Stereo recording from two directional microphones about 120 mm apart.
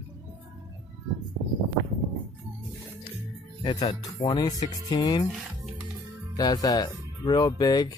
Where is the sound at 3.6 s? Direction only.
35° left (ahead or behind).